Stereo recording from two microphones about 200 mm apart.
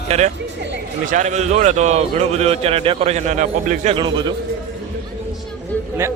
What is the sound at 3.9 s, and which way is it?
Speech, 20° right (ahead or behind).